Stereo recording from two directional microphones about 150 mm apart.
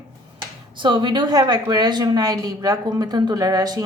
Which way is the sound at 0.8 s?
30° right (ahead or behind).